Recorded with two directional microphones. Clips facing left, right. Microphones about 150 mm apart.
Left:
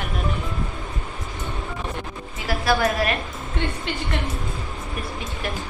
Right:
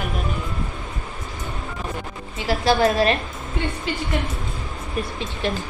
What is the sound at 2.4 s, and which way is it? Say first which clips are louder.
Speech: right 3 dB; 25° right (ahead or behind).